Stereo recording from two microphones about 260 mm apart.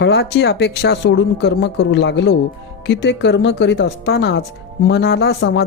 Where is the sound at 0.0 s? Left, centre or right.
Left.